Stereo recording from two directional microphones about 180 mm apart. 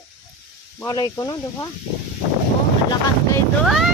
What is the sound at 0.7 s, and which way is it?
Speech, 20° left (ahead or behind).